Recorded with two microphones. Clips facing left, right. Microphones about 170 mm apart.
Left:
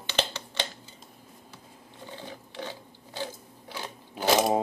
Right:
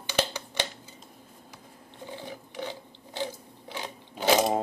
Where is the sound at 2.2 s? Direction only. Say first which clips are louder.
Right 1 dB; 15° right (ahead or behind).